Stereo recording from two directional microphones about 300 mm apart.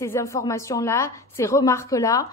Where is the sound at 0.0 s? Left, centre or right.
Centre.